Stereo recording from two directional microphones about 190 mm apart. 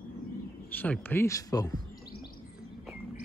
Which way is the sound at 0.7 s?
10° left (ahead or behind).